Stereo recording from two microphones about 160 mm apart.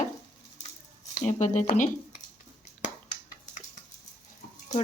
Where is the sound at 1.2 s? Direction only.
50° left (ahead or behind).